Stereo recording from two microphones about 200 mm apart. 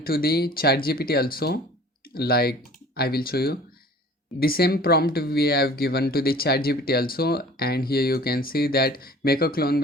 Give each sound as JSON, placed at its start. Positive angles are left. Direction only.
{"t": 0.0, "sound": "speech", "side_deg": 50}